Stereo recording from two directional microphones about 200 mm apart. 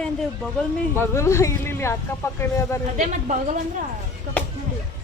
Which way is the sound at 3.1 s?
40° right (ahead or behind).